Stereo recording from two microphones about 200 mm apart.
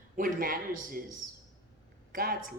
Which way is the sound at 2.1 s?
45° right (ahead or behind).